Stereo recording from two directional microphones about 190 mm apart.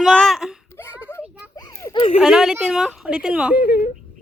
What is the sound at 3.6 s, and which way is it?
Speech, 50° left (ahead or behind).